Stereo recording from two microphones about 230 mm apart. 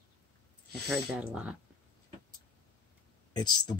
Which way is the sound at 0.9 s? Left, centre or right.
Centre.